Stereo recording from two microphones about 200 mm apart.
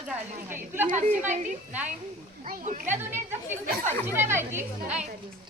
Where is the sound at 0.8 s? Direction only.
40° right (ahead or behind).